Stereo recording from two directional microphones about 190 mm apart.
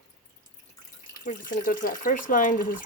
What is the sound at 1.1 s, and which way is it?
Speech, 45° left (ahead or behind).